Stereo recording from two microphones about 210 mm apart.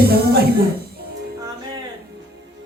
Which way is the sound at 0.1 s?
45° right (ahead or behind).